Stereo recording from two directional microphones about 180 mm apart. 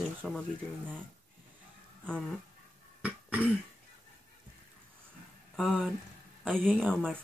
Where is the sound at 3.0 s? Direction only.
10° right (ahead or behind).